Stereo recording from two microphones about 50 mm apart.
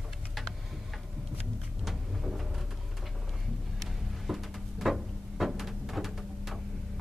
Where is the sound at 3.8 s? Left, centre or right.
Centre.